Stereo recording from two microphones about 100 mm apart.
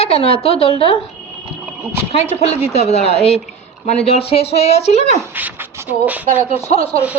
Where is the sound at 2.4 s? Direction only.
90° left.